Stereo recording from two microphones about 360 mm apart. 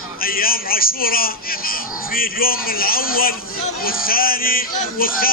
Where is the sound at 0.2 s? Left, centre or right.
Left.